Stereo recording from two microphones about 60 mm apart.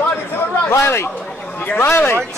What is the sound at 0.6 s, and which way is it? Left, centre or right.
Speech, left.